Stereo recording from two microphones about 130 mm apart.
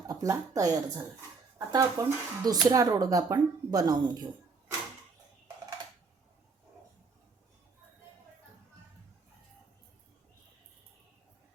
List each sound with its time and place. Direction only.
0.1 s speech: 25° right (ahead or behind)